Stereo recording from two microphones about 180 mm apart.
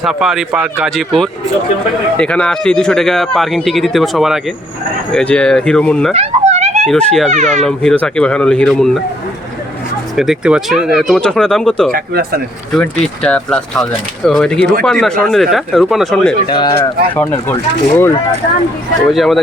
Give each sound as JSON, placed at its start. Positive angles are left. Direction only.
{"t": 0.0, "sound": "speech", "side_deg": 0}
{"t": 6.1, "sound": "a sound", "side_deg": -40}
{"t": 6.8, "sound": "speech", "side_deg": 0}
{"t": 7.3, "sound": "speech", "side_deg": -40}
{"t": 7.6, "sound": "speech", "side_deg": 5}
{"t": 10.2, "sound": "speech", "side_deg": -5}
{"t": 11.9, "sound": "speech", "side_deg": -55}
{"t": 12.7, "sound": "speech", "side_deg": 5}
{"t": 16.5, "sound": "speech", "side_deg": 25}
{"t": 17.2, "sound": "speech", "side_deg": 10}
{"t": 19.1, "sound": "speech", "side_deg": 0}